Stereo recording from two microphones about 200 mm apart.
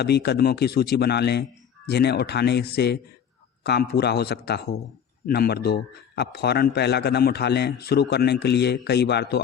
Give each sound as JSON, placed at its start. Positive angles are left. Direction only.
{"t": 0.0, "sound": "a man's voice", "side_deg": 55}